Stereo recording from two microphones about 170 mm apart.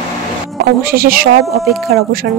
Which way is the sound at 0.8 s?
60° right (ahead or behind).